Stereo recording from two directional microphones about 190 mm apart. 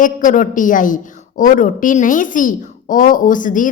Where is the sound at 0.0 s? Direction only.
45° left (ahead or behind).